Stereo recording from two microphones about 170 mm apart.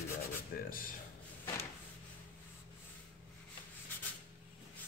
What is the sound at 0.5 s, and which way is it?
Speech, 65° left (ahead or behind).